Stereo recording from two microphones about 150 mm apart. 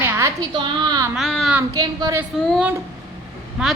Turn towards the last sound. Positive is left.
turn(degrees=-5)  # may be behind; listen again after turning